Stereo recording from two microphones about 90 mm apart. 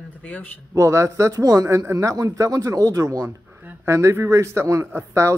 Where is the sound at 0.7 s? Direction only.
35° right (ahead or behind).